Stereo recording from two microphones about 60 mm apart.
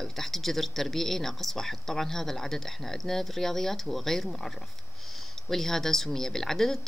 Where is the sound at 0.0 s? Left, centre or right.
Centre.